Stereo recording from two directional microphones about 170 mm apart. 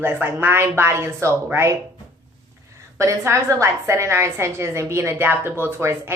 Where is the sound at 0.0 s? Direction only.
15° right (ahead or behind).